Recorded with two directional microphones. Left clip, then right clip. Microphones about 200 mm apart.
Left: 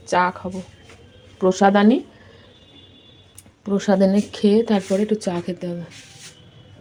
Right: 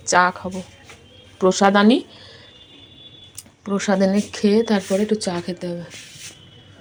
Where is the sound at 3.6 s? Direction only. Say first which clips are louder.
Left 1 dB; 20° left (ahead or behind).